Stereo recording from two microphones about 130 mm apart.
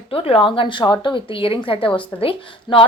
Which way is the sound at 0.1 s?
45° left (ahead or behind).